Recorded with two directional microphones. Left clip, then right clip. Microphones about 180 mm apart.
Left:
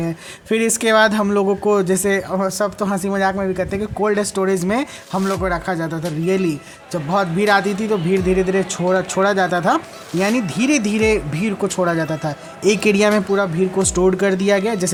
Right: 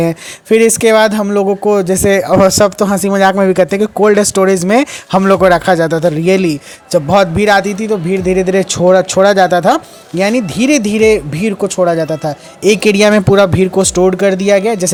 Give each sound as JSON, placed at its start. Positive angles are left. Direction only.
{"t": 0.4, "sound": "a man's voice", "side_deg": -30}